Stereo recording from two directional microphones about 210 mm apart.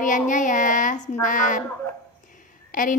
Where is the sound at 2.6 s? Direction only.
40° left (ahead or behind).